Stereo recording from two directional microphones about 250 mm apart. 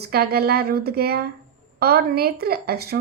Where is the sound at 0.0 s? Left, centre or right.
Right.